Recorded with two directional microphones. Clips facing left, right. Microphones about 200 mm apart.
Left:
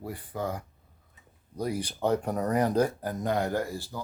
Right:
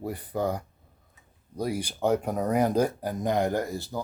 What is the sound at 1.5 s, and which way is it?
Speech, 10° right (ahead or behind).